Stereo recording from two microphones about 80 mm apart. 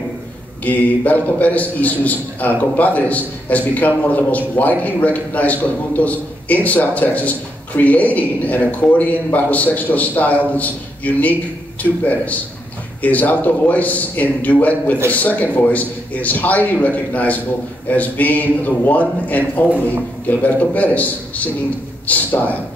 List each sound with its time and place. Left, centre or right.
0.7 s a man's voice: centre